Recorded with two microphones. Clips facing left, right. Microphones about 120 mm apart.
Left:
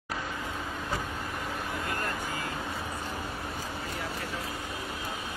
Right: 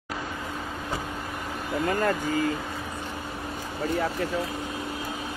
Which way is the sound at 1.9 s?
90° right.